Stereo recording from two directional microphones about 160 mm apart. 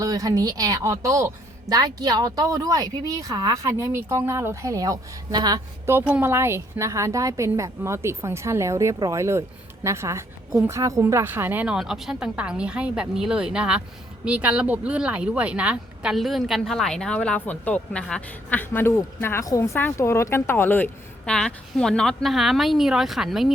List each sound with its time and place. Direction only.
0.0 s a woman's voice: 20° right (ahead or behind); by 23.5 s centre (ahead or behind)